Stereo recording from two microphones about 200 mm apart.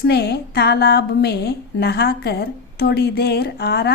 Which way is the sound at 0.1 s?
55° left (ahead or behind).